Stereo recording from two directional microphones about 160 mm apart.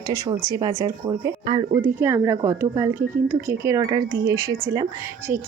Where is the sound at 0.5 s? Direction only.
20° right (ahead or behind).